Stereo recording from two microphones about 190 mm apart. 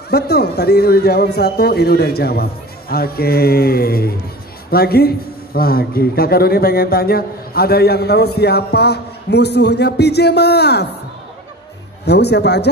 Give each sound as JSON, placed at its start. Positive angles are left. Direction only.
{"t": 0.1, "sound": "a man's voice", "side_deg": 55}
{"t": 12.1, "sound": "a man's voice", "side_deg": 60}